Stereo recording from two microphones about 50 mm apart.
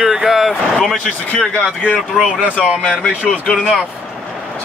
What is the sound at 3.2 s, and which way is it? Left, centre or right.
Speech, left.